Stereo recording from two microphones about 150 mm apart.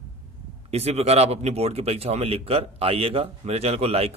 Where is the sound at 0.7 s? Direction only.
45° right (ahead or behind).